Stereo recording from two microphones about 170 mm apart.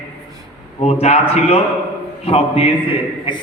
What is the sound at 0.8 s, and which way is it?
Speech, 35° left (ahead or behind).